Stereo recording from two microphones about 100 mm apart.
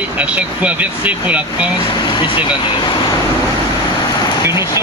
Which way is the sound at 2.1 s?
55° left (ahead or behind).